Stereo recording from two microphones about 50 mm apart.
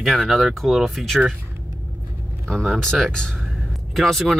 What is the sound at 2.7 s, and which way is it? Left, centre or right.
Speech, centre.